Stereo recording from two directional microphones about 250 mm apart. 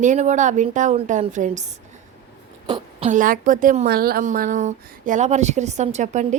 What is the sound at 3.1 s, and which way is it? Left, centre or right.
A woman's voice, right.